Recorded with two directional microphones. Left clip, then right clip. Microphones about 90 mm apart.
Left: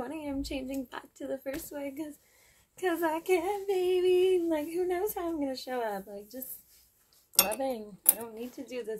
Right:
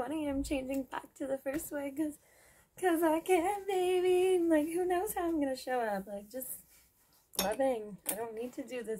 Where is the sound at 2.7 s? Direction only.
20° right (ahead or behind).